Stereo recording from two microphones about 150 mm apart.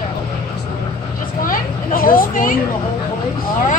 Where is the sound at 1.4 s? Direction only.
65° left (ahead or behind).